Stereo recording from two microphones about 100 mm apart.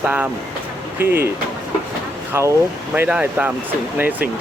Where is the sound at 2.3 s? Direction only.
25° right (ahead or behind).